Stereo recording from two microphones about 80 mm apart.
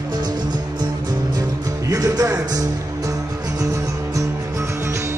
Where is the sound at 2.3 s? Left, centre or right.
Right.